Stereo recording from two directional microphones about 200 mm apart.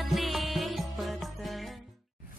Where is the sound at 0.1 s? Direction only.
Centre (ahead or behind).